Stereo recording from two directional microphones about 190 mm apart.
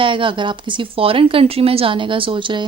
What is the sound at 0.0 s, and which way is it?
Speech, 25° right (ahead or behind).